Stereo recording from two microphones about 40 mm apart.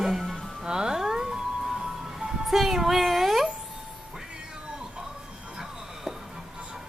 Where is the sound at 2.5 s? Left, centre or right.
Centre.